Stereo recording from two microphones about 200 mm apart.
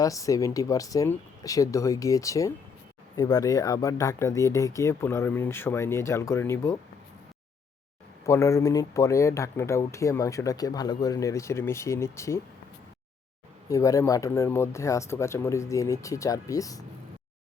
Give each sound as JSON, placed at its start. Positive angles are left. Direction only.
{"t": 0.0, "sound": "speech", "side_deg": 15}
{"t": 8.3, "sound": "speech", "side_deg": 15}
{"t": 13.7, "sound": "speech", "side_deg": 15}